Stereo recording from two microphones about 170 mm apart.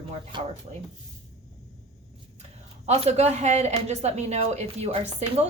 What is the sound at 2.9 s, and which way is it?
Speech, 40° right (ahead or behind).